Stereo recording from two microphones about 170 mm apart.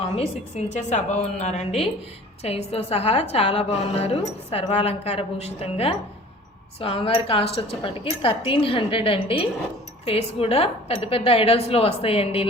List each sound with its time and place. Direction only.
0.0 s a woman's voice: 40° left (ahead or behind)